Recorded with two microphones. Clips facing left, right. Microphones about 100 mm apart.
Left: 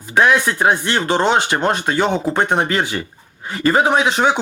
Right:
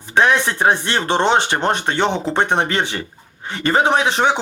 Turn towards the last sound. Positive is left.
turn(degrees=-30)  # may be behind; listen again after turning